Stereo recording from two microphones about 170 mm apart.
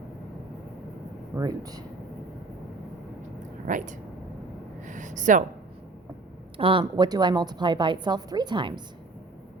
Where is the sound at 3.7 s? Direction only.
50° right (ahead or behind).